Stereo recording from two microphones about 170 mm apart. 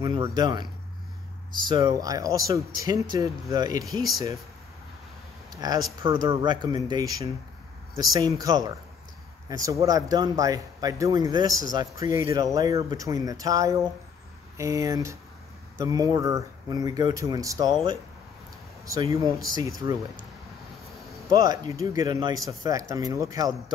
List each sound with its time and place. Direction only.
0.0 s speech: 25° right (ahead or behind)
1.7 s speech: 25° right (ahead or behind)
5.5 s a sound: 25° right (ahead or behind)
6.0 s speech: 25° right (ahead or behind)
18.9 s speech: 20° right (ahead or behind)
21.3 s speech: 20° right (ahead or behind)